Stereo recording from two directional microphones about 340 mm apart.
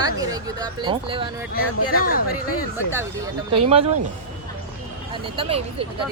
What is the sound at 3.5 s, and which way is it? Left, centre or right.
Speech, centre.